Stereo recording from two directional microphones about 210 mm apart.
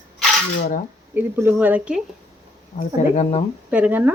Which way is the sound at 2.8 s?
30° left (ahead or behind).